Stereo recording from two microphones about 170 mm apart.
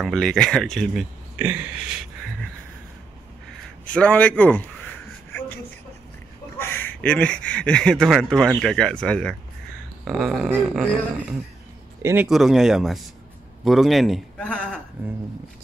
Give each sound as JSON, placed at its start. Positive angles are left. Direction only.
{"t": 0.0, "sound": "speech", "side_deg": 5}
{"t": 1.4, "sound": "a sound", "side_deg": -10}
{"t": 3.8, "sound": "a man's voice", "side_deg": 5}
{"t": 6.6, "sound": "speech", "side_deg": 10}
{"t": 12.0, "sound": "a man's voice", "side_deg": -15}
{"t": 12.3, "sound": "speech", "side_deg": 0}